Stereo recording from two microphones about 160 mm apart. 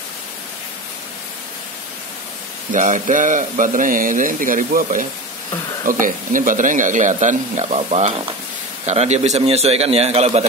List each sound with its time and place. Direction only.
2.7 s a man's voice: 50° right (ahead or behind)